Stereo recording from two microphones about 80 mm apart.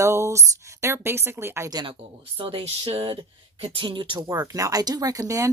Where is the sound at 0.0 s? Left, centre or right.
Right.